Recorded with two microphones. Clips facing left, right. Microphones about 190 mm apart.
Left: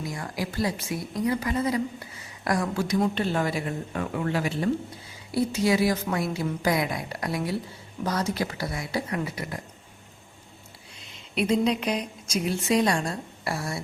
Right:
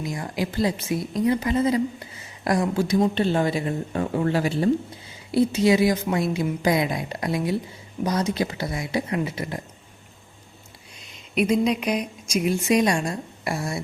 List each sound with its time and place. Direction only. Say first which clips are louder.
0.0 s speech: right 4 dB; 20° right (ahead or behind)
5.3 s speech: right 5 dB; 20° right (ahead or behind)
11.3 s a woman's voice: right 3 dB; 10° right (ahead or behind)